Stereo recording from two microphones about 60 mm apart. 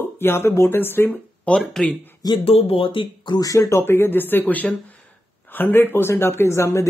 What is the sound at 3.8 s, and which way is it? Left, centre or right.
Speech, left.